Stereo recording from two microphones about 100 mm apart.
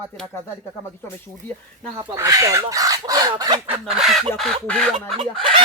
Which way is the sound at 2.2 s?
35° right (ahead or behind).